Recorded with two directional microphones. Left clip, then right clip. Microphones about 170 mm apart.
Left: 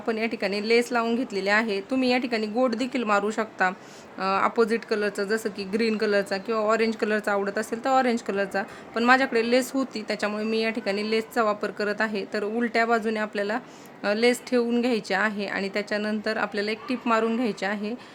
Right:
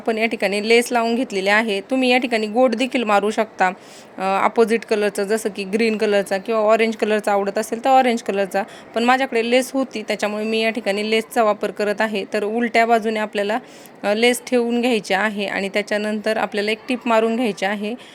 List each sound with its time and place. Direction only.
0.0 s speech: 20° right (ahead or behind)